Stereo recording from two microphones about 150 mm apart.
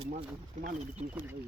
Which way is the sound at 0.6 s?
60° right (ahead or behind).